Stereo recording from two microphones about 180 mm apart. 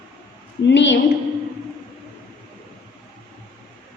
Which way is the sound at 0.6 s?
80° left.